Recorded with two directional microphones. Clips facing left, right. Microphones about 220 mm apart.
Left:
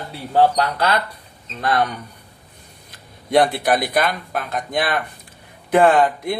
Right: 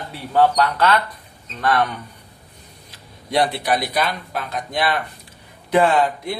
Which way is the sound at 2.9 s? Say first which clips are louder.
Left 4 dB; 50° left (ahead or behind).